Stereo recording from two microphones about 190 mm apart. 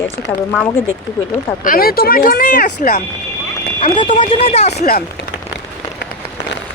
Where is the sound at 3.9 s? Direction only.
25° left (ahead or behind).